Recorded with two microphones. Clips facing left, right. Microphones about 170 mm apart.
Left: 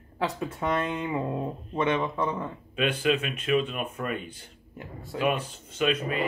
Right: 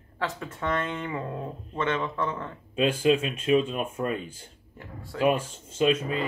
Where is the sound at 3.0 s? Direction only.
25° right (ahead or behind).